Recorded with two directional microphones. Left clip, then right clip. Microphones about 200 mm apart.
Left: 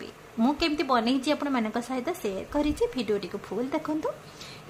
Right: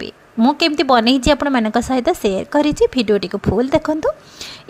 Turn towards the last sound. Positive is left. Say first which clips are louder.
# right 13 dB
turn(degrees=-40)  # may be behind; listen again after turning